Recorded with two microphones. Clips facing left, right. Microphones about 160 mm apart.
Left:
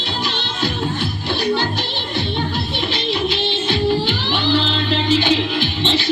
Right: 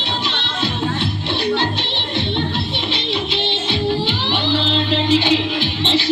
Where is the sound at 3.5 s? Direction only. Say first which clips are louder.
Left 1 dB; 25° right (ahead or behind).